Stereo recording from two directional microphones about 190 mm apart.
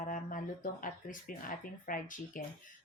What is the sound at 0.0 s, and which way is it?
A woman's voice, 45° left (ahead or behind).